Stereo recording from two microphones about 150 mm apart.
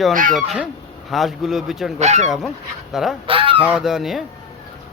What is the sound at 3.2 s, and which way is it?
Goose, 35° right (ahead or behind).